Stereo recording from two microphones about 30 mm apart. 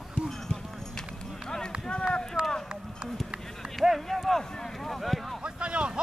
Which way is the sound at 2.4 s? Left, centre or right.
Right.